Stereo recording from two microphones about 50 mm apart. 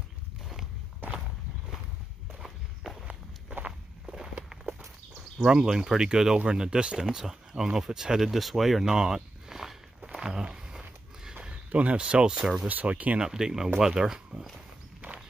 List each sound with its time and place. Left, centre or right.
2.4 s walk: centre
4.0 s walk: centre
5.7 s speech: centre
8.9 s walk: centre
10.2 s a sound: centre
12.6 s speech: right
13.2 s speech: centre